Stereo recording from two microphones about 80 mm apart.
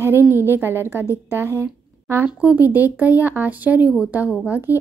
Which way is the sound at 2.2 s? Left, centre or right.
Centre.